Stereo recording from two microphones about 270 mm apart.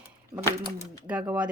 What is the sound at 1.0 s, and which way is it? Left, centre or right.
Speech, centre.